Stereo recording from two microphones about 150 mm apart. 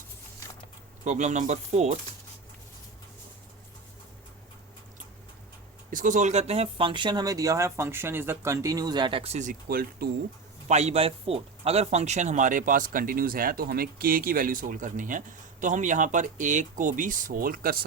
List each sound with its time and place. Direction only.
1.0 s speech: 55° right (ahead or behind)
5.9 s speech: 60° right (ahead or behind); by 10.1 s 75° right (ahead or behind)
10.7 s speech: 45° right (ahead or behind); by 17.8 s 80° right